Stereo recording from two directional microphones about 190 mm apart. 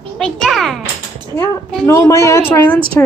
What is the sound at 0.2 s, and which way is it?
Music, centre (ahead or behind).